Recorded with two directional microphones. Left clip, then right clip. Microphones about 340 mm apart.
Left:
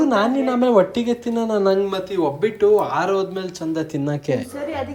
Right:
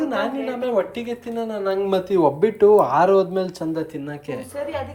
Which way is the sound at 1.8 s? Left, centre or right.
Centre.